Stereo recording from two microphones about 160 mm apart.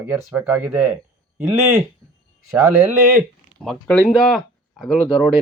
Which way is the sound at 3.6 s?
5° left (ahead or behind).